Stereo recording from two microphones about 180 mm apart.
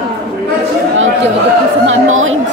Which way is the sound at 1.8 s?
90° right.